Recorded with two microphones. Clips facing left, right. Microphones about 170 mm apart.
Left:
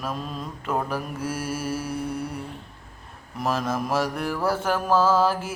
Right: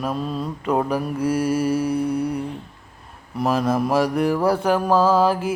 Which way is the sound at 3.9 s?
Centre (ahead or behind).